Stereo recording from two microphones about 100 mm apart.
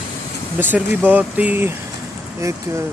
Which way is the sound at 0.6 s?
20° right (ahead or behind).